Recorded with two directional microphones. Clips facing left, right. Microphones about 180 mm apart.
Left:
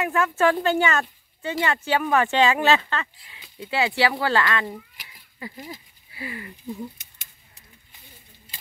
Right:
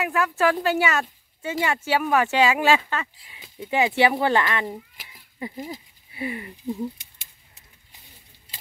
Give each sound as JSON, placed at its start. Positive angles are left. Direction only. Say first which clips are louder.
{"t": 0.0, "sound": "speech", "louder": "left 1 dB", "side_deg": 0}